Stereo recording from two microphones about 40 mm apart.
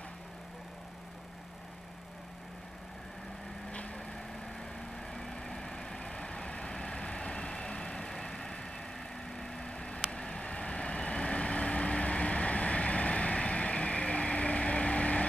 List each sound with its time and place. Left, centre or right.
3.7 s vehicle: left
4.7 s vehicle: centre; by 15.2 s left